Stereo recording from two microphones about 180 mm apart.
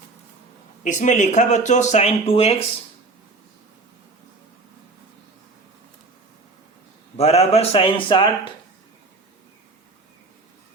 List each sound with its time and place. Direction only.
0.9 s speech: 45° left (ahead or behind)
7.2 s speech: 35° left (ahead or behind)